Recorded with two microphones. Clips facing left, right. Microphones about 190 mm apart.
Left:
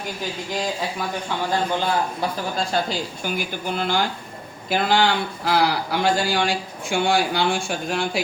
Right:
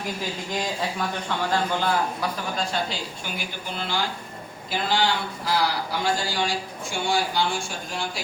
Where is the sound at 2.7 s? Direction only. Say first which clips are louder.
Left 5 dB; 40° left (ahead or behind).